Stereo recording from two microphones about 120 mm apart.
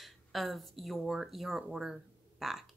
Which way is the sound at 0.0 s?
Centre (ahead or behind).